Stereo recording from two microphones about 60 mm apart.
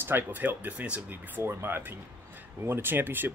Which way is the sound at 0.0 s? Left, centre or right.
Right.